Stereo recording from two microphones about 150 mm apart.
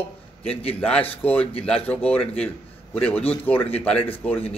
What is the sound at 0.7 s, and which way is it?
Speech, 5° left (ahead or behind).